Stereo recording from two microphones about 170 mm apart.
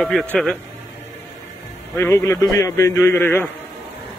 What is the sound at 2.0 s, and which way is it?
A man's voice, 15° left (ahead or behind).